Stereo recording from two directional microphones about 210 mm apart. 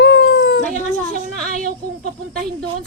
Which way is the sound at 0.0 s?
55° left (ahead or behind).